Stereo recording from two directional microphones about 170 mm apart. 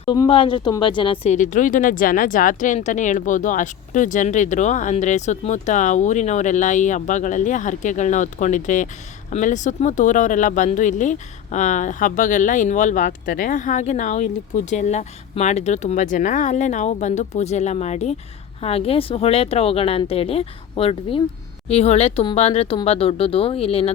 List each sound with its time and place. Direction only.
0.0 s speech: 30° left (ahead or behind)